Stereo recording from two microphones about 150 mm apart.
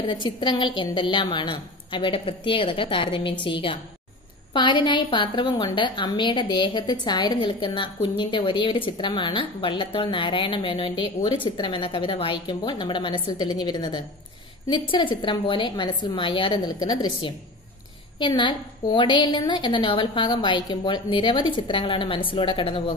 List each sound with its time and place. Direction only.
0.0 s a woman's voice: 30° left (ahead or behind)